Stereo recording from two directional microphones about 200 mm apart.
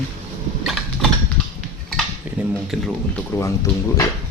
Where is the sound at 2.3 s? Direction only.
10° right (ahead or behind).